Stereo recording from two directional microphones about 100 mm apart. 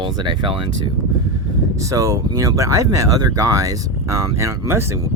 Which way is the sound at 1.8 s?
30° right (ahead or behind).